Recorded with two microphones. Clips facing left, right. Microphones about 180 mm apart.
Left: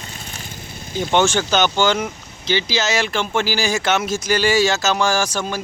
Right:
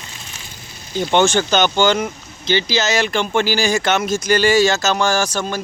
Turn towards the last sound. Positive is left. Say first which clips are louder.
# right 1 dB
turn(degrees=10)  # may be behind; listen again after turning